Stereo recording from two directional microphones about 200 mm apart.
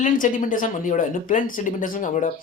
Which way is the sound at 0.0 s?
40° left (ahead or behind).